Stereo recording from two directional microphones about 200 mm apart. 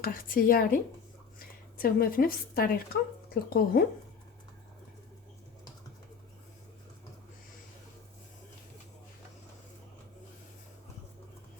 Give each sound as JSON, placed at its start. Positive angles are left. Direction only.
{"t": 0.0, "sound": "a woman's voice", "side_deg": 45}